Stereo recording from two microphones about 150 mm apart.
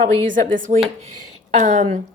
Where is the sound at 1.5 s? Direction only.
55° right (ahead or behind).